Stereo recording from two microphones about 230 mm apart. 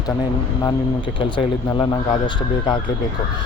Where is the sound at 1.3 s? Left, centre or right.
Centre.